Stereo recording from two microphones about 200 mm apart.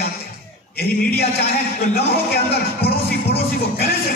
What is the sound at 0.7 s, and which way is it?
Speech, 50° left (ahead or behind).